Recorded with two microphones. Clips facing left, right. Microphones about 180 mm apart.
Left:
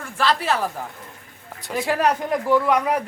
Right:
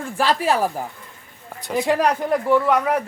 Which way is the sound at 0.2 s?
15° right (ahead or behind).